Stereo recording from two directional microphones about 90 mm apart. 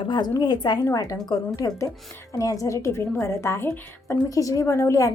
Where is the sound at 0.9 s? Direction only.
40° left (ahead or behind).